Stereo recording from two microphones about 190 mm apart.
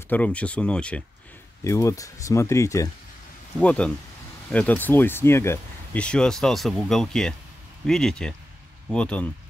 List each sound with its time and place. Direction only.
0.1 s speech: 5° left (ahead or behind)